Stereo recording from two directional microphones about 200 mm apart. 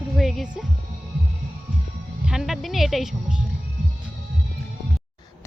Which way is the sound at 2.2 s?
Centre (ahead or behind).